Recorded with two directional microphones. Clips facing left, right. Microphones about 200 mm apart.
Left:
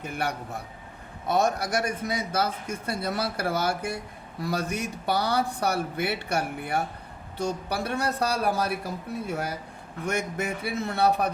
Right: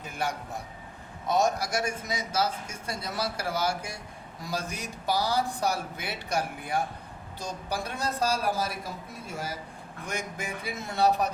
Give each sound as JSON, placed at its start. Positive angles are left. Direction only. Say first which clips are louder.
{"t": 0.0, "sound": "a man's voice", "louder": "left 2 dB", "side_deg": 60}